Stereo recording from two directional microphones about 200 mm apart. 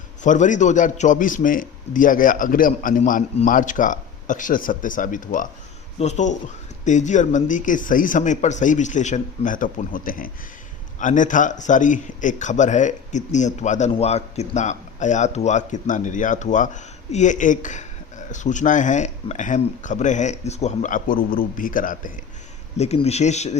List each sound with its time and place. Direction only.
0.2 s a man's voice: 40° left (ahead or behind)